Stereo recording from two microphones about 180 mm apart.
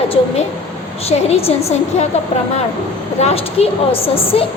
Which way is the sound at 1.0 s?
35° left (ahead or behind).